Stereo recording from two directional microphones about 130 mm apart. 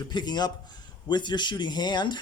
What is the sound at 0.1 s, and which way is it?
A man's voice, 35° left (ahead or behind).